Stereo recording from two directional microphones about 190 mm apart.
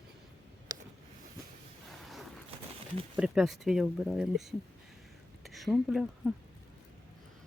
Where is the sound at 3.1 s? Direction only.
5° right (ahead or behind).